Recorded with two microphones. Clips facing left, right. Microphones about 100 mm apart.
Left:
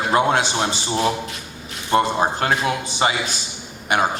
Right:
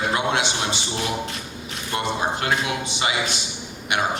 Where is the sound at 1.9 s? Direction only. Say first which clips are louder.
Left 6 dB; 40° left (ahead or behind).